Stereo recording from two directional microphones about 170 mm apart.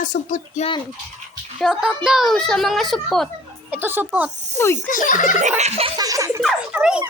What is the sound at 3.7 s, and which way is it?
Speech, 10° right (ahead or behind).